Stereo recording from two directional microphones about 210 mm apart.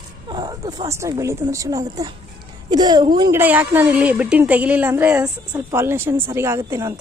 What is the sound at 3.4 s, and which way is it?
Speech, 10° right (ahead or behind).